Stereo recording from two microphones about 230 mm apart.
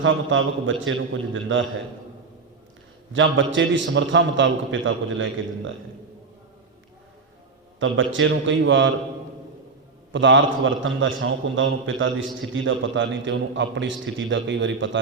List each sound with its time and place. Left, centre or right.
0.0 s a man's voice: right
3.1 s a man's voice: right
7.8 s a man's voice: right
10.1 s a man's voice: right